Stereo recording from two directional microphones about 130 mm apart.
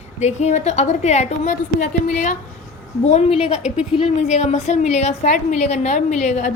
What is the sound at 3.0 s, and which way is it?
A woman's voice, 55° left (ahead or behind).